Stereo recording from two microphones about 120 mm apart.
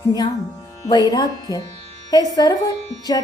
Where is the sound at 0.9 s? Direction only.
35° left (ahead or behind).